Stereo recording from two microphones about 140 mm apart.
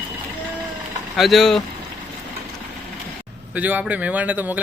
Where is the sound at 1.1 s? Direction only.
Centre (ahead or behind).